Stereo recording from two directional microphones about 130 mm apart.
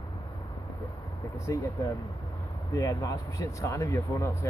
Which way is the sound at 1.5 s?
25° left (ahead or behind).